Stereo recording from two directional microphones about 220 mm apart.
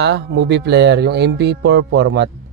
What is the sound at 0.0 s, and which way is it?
Speech, 50° right (ahead or behind).